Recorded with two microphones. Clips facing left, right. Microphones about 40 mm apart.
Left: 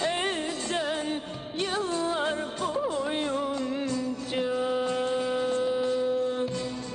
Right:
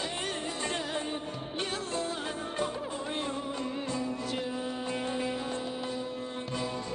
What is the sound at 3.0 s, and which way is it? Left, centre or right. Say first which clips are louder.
Music: left 5 dB; left.